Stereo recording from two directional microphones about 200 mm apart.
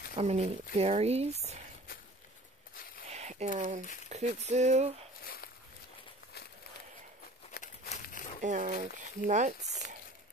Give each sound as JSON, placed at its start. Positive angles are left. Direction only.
{"t": 0.1, "sound": "speech", "side_deg": -30}
{"t": 3.1, "sound": "a sound", "side_deg": -35}
{"t": 4.1, "sound": "speech", "side_deg": -35}
{"t": 5.2, "sound": "a sound", "side_deg": 50}
{"t": 7.6, "sound": "crumpling", "side_deg": 45}
{"t": 8.4, "sound": "speech", "side_deg": -40}